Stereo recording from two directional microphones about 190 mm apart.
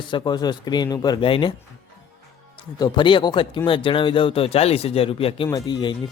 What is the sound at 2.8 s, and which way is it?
Speech, 25° left (ahead or behind).